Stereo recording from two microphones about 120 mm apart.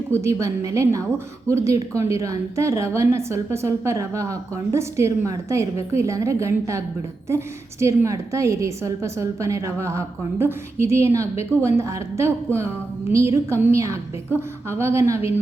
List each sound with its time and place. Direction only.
0.1 s a woman's voice: 25° right (ahead or behind)